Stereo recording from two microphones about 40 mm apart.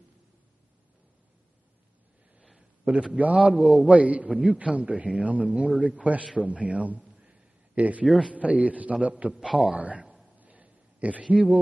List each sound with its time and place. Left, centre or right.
2.8 s a man's voice: right
3.3 s a man's voice: right
3.8 s a man's voice: right
6.3 s a sound: right
8.2 s a man's voice: right
10.3 s a sound: right